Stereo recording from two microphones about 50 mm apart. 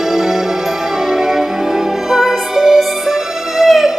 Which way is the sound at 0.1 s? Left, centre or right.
Centre.